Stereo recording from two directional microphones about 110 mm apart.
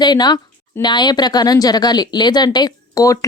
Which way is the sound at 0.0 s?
40° left (ahead or behind).